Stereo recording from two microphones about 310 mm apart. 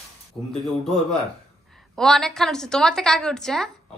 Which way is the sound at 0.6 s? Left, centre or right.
Centre.